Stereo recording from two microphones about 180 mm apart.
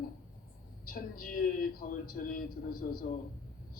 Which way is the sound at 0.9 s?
55° left (ahead or behind).